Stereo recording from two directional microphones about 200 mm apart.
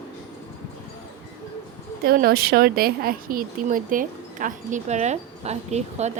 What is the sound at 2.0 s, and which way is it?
Speech, 50° right (ahead or behind).